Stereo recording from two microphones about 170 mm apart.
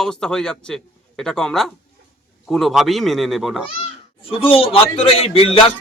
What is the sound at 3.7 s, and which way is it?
Speech, 35° left (ahead or behind).